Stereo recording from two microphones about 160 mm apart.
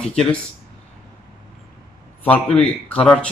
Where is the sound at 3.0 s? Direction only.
5° left (ahead or behind).